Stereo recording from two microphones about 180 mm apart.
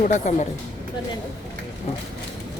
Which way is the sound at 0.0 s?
45° left (ahead or behind).